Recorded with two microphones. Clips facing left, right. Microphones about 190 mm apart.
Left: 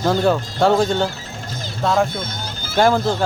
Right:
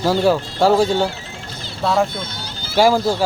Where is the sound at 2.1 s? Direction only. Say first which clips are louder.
Left 2 dB; 45° left (ahead or behind).